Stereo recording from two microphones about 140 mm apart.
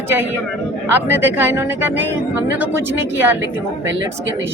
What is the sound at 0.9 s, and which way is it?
Speech, 15° right (ahead or behind).